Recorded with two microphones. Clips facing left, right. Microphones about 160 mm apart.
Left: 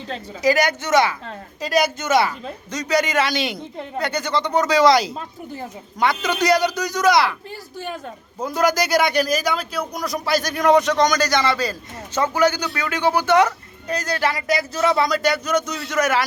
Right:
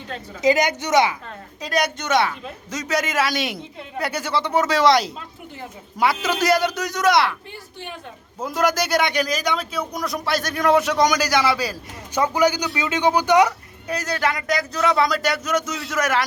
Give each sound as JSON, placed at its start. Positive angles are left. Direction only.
{"t": 0.4, "sound": "speech", "side_deg": -20}
{"t": 1.6, "sound": "a man's voice", "side_deg": 5}
{"t": 8.4, "sound": "a man's voice", "side_deg": 0}